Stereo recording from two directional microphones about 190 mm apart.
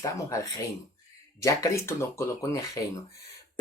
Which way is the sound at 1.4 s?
15° left (ahead or behind).